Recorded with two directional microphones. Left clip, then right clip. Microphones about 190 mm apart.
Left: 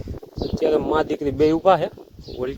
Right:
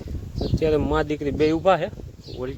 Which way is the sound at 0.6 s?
10° left (ahead or behind).